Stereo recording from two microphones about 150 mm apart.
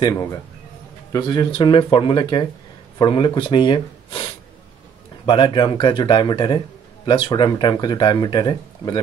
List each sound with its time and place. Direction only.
0.0 s speech: 20° left (ahead or behind)